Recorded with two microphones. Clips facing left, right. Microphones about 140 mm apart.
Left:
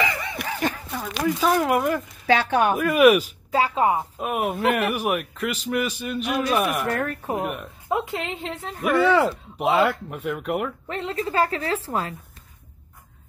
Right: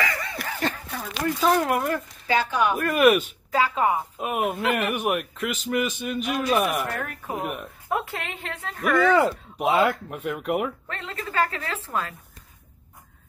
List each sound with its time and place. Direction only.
0.0 s a sound: 20° left (ahead or behind)
1.4 s speech: centre (ahead or behind)
2.2 s speech: 85° left
2.8 s a woman's voice: 5° left (ahead or behind)
3.5 s a woman's voice: 30° left (ahead or behind)
4.2 s speech: centre (ahead or behind)
7.9 s a woman's voice: 20° left (ahead or behind)
8.8 s speech: 5° left (ahead or behind)
10.9 s a woman's voice: 30° left (ahead or behind)